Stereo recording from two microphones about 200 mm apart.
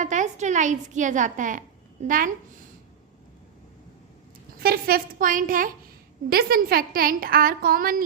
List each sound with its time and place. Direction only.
0.0 s a woman's voice: 40° right (ahead or behind)
4.6 s a woman's voice: 50° right (ahead or behind)